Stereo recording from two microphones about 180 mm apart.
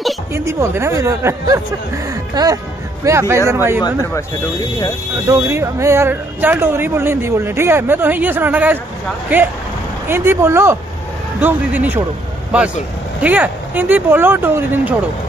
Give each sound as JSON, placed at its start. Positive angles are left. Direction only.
{"t": 0.3, "sound": "speech", "side_deg": -15}
{"t": 5.2, "sound": "speech", "side_deg": -15}
{"t": 13.2, "sound": "speech", "side_deg": -10}